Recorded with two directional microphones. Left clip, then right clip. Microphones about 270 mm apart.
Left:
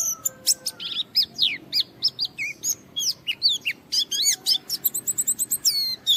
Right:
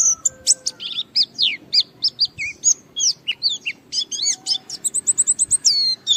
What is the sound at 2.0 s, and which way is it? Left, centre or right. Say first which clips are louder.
Chirp: right 5 dB; centre.